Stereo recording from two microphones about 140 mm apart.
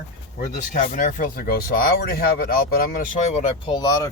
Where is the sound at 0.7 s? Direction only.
70° left (ahead or behind); by 3.2 s 85° left.